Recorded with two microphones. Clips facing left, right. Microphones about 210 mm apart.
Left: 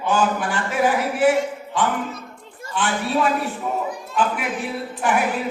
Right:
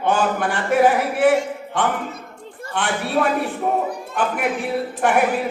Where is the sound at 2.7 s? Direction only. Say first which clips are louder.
Even; 60° right (ahead or behind).